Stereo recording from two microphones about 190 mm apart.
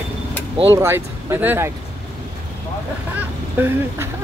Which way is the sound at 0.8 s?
15° right (ahead or behind).